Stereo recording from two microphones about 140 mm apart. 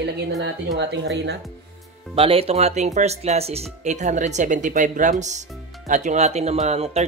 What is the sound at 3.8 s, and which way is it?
Speech, 60° right (ahead or behind).